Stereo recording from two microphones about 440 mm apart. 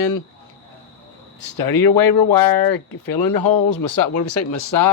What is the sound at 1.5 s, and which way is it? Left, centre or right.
Speech, left.